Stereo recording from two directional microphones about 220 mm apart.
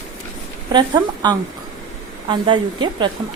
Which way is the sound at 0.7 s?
20° right (ahead or behind).